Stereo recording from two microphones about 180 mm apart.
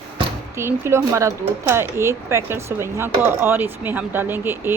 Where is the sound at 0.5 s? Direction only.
15° right (ahead or behind).